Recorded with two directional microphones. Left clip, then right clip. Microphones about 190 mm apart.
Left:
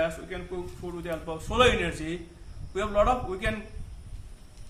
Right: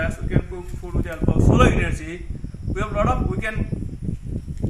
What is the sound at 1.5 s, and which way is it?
A man's voice, 10° left (ahead or behind).